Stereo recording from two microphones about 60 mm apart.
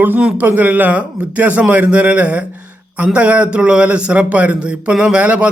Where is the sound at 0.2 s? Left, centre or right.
Centre.